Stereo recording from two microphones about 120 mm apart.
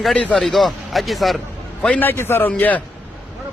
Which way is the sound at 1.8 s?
15° left (ahead or behind).